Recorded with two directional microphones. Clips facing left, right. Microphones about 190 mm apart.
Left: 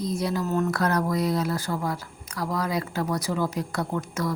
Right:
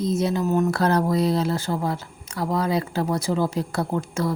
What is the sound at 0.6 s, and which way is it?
Speech, 30° right (ahead or behind).